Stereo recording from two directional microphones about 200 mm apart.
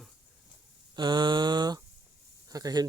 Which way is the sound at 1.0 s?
20° right (ahead or behind).